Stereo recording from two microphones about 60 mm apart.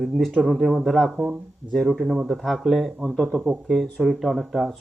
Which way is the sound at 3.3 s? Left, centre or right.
Right.